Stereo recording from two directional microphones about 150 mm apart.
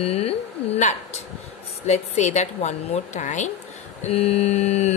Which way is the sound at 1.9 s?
50° left (ahead or behind).